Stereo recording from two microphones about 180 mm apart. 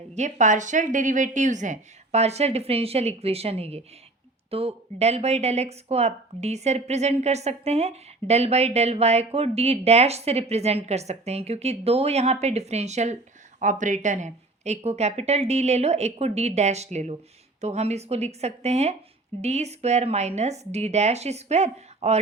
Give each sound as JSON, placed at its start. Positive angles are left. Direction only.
{"t": 0.1, "sound": "speech", "side_deg": -40}